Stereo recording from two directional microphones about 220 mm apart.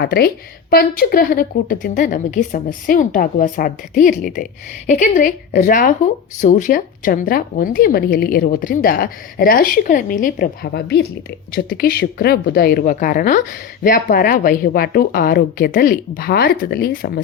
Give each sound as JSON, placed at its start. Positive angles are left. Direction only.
{"t": 0.0, "sound": "a woman's voice", "side_deg": 45}